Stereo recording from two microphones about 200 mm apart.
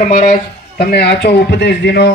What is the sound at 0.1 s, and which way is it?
A man's voice, 40° left (ahead or behind).